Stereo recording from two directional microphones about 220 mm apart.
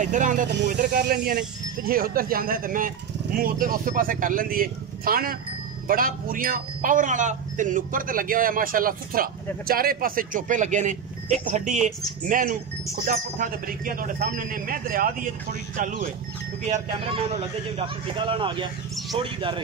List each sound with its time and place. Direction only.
0.0 s a man's voice: 35° right (ahead or behind)
0.5 s a man's voice: 50° right (ahead or behind); by 19.6 s 25° right (ahead or behind)